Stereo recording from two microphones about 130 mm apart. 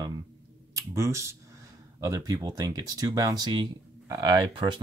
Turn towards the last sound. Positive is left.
turn(degrees=-35)  # may be behind; listen again after turning